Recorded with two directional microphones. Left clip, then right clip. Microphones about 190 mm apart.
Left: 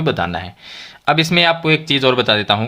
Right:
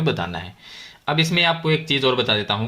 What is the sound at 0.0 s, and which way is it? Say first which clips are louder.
Speech: left 5 dB; 30° left (ahead or behind).